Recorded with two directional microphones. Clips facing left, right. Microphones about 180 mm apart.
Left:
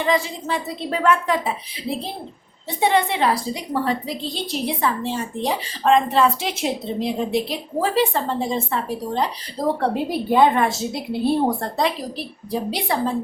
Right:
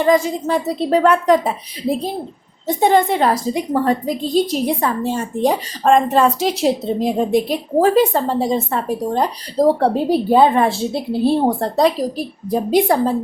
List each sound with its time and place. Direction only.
0.0 s a woman's voice: 45° right (ahead or behind)
2.6 s a woman's voice: 45° right (ahead or behind)
11.6 s a woman's voice: 40° right (ahead or behind)